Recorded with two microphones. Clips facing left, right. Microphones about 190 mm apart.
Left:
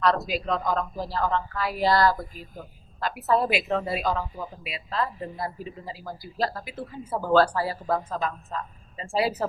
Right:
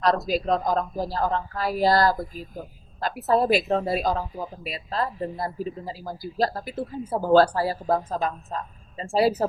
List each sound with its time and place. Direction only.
0.0 s a man's voice: 40° right (ahead or behind)